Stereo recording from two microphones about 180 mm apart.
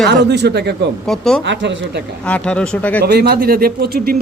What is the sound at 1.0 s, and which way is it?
Speech, 5° left (ahead or behind).